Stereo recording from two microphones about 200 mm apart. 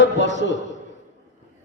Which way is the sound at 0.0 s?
65° left (ahead or behind).